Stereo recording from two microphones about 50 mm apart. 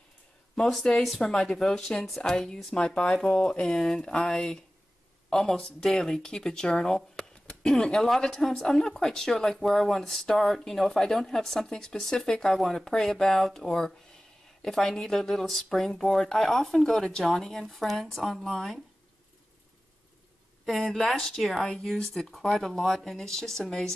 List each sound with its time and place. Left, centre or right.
1.1 s a woman's voice: centre
20.6 s a woman's voice: centre